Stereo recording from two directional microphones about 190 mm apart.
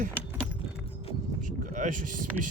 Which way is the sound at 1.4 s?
40° right (ahead or behind).